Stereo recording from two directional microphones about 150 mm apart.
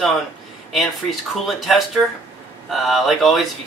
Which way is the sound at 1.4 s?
Centre (ahead or behind).